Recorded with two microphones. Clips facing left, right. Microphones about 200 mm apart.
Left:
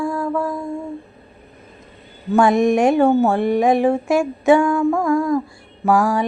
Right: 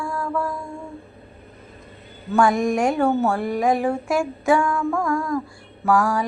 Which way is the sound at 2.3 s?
20° left (ahead or behind).